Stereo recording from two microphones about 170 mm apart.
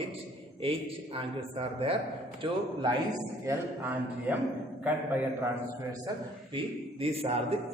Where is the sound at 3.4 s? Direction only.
10° right (ahead or behind).